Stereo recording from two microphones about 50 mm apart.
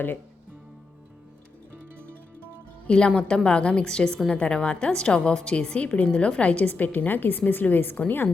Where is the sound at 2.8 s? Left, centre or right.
Left.